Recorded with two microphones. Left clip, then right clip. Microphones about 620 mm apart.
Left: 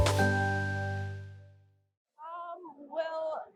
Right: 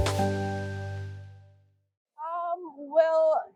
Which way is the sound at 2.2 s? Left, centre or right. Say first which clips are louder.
Right 10 dB; right.